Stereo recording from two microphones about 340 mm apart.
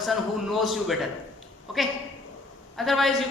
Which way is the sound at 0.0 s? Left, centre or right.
Centre.